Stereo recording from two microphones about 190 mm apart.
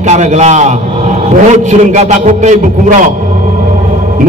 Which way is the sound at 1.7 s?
40° right (ahead or behind).